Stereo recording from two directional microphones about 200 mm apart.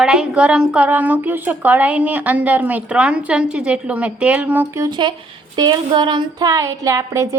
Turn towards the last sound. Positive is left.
turn(degrees=-15)  # may be behind; listen again after turning